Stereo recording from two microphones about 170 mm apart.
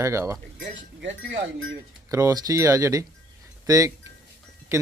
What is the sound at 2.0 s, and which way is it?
Speech, 20° right (ahead or behind).